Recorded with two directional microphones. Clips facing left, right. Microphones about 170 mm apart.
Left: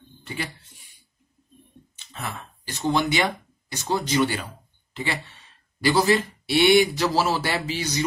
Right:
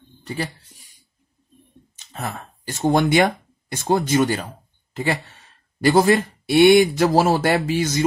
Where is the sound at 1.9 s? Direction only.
40° right (ahead or behind).